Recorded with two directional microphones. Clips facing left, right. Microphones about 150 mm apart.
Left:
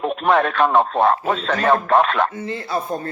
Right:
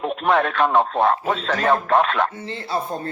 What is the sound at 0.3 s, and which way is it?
A man's voice, 50° left (ahead or behind).